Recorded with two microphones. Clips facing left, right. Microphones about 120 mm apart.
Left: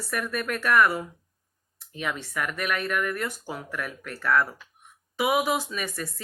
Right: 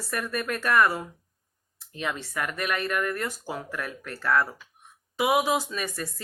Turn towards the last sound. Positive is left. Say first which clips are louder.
# even
turn(degrees=-30)  # may be behind; listen again after turning